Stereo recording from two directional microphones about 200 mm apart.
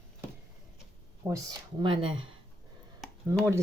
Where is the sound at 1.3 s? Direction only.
20° right (ahead or behind).